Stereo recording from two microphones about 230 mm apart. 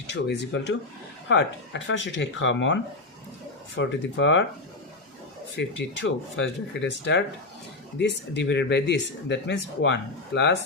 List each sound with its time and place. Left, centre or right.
0.1 s speech: left
3.8 s speech: left
5.5 s speech: left